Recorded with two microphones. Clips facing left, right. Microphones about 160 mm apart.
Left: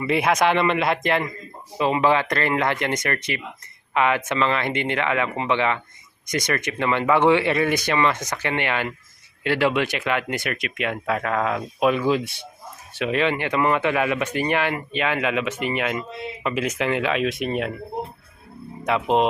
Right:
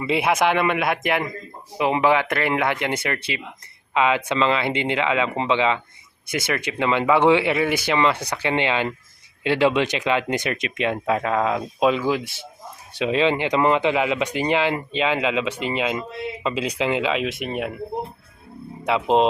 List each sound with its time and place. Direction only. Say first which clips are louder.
0.1 s speech: even; 10° right (ahead or behind)
1.8 s speech: right 1 dB; 15° right (ahead or behind)
11.9 s speech: left 2 dB; 5° right (ahead or behind)
12.9 s speech: right 2 dB; 20° right (ahead or behind)
18.9 s speech: right 2 dB; 20° right (ahead or behind)